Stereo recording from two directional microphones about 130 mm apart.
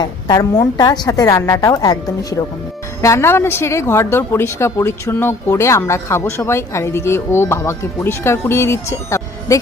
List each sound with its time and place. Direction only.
0.0 s a woman's voice: 30° left (ahead or behind)